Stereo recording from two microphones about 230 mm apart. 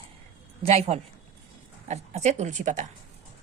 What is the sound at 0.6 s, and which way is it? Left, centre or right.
Speech, right.